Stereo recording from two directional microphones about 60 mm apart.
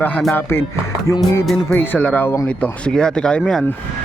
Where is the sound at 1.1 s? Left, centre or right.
Left.